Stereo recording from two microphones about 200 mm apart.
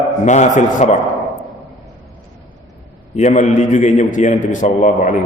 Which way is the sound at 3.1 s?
35° left (ahead or behind).